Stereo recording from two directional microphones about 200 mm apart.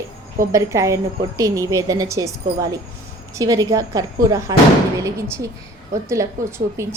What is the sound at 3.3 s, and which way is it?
A woman's voice, 15° right (ahead or behind).